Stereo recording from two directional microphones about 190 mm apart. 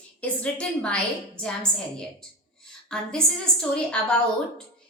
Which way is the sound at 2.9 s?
5° left (ahead or behind).